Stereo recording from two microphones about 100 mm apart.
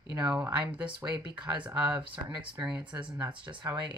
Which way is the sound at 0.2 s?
10° right (ahead or behind).